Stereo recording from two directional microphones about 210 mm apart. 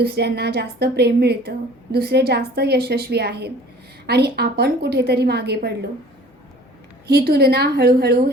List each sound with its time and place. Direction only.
0.0 s speech: 50° right (ahead or behind)
7.1 s speech: 50° right (ahead or behind)